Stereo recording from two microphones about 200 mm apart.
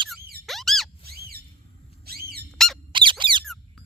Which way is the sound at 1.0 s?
50° right (ahead or behind).